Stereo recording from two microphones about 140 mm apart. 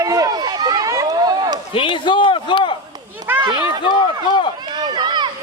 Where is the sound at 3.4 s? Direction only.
30° right (ahead or behind).